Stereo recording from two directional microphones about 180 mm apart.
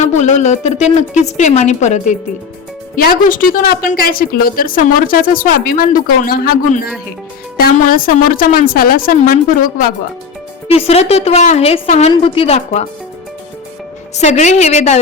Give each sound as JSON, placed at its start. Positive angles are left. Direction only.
{"t": 0.0, "sound": "a woman's voice", "side_deg": 40}
{"t": 10.7, "sound": "a woman's voice", "side_deg": 35}
{"t": 14.2, "sound": "a woman's voice", "side_deg": 40}